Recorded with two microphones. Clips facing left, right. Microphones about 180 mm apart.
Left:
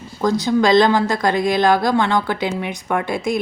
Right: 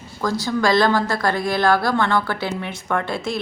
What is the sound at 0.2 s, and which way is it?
Speech, 20° left (ahead or behind).